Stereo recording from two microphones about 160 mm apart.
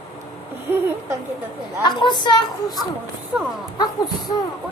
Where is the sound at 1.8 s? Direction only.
30° left (ahead or behind).